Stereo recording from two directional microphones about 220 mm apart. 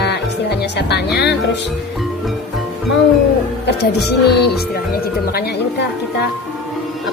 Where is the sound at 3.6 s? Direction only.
50° left (ahead or behind).